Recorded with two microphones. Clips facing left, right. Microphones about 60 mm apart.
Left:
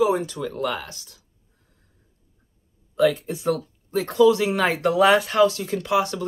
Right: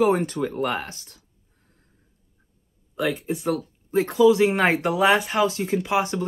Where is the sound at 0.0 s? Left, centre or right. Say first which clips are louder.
Right 1 dB; right.